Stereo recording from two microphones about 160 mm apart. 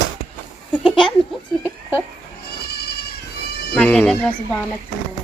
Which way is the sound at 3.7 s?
5° left (ahead or behind).